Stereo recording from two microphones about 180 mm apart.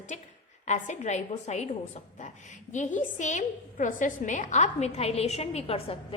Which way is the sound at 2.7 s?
45° left (ahead or behind).